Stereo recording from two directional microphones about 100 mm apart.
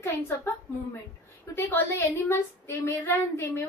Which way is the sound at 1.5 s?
25° left (ahead or behind).